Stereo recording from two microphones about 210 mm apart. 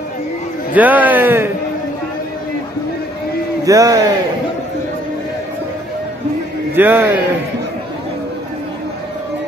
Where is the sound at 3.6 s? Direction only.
15° right (ahead or behind).